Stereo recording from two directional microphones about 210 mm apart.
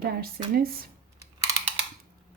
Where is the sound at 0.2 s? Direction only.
45° right (ahead or behind).